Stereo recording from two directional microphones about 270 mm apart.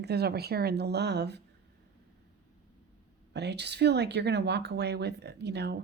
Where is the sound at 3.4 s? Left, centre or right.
Right.